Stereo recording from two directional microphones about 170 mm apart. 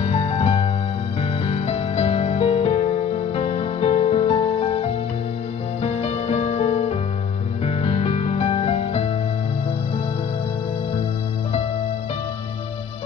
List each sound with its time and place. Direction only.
0.0 s music: 35° left (ahead or behind)